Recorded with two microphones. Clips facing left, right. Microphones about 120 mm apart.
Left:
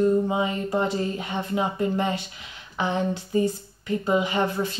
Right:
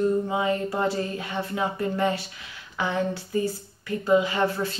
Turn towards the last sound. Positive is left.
turn(degrees=20)  # may be behind; listen again after turning